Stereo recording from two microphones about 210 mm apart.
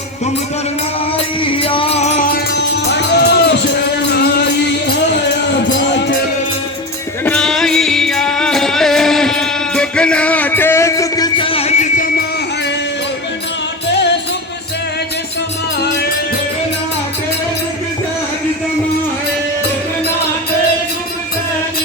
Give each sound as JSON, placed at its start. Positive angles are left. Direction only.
{"t": 1.1, "sound": "music", "side_deg": 25}
{"t": 7.3, "sound": "music", "side_deg": 5}